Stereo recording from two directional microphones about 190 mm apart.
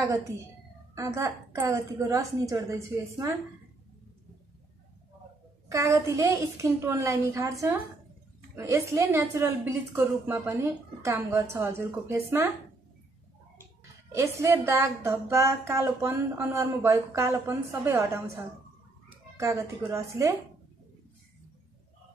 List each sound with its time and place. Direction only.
0.9 s speech: 15° right (ahead or behind)
5.7 s speech: 15° right (ahead or behind)
8.5 s speech: 15° right (ahead or behind)
14.1 s speech: 15° right (ahead or behind)